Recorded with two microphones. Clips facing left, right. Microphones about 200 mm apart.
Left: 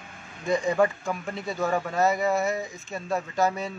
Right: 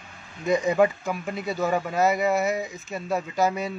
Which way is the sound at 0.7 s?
15° right (ahead or behind).